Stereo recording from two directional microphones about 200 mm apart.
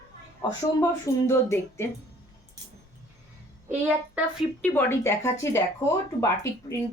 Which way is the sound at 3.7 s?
10° right (ahead or behind).